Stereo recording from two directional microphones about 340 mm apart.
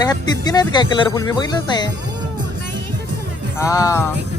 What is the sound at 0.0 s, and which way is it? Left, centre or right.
Speech, centre.